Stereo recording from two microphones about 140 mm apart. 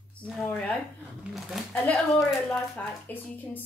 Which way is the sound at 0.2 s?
5° left (ahead or behind).